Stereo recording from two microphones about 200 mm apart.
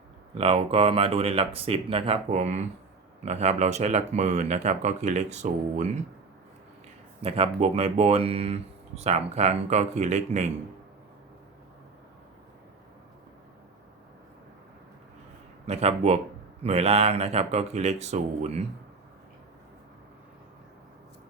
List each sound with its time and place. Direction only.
0.3 s speech: 30° right (ahead or behind)
7.2 s speech: 30° right (ahead or behind)
15.6 s speech: 30° right (ahead or behind)